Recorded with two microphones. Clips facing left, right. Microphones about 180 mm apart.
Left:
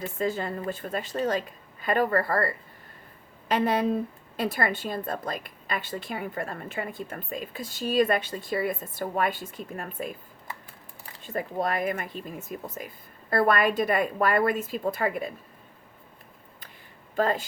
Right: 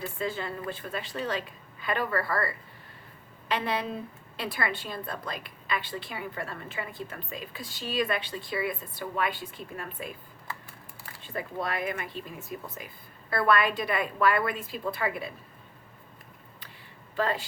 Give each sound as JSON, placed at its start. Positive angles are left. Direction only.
{"t": 0.2, "sound": "a woman's voice", "side_deg": 45}
{"t": 11.2, "sound": "a woman's voice", "side_deg": 45}
{"t": 17.2, "sound": "a woman's voice", "side_deg": 45}